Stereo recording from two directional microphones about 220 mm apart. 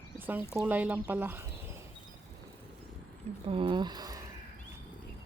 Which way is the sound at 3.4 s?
25° right (ahead or behind).